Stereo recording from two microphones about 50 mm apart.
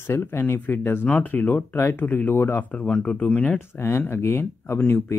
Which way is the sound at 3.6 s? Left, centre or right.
Left.